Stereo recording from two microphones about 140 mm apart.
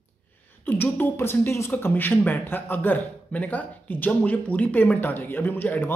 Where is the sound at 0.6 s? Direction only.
15° left (ahead or behind).